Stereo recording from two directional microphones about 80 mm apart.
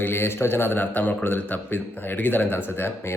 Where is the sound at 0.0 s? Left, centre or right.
Left.